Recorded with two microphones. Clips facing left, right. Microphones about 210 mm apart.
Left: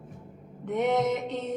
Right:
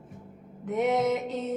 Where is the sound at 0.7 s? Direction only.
Centre (ahead or behind).